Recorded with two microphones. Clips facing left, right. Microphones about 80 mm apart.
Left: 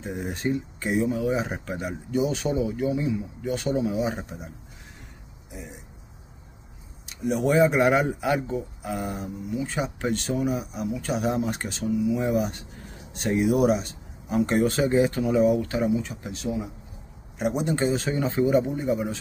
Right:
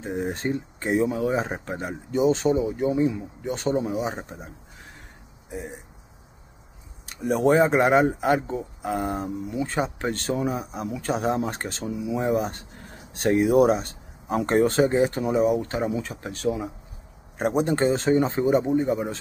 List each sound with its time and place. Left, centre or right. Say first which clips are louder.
0.0 s speech: right 2 dB; right
5.5 s speech: right 6 dB; right
7.2 s speech: right 2 dB; right
15.9 s speech: left 2 dB; right
18.7 s speech: right 3 dB; right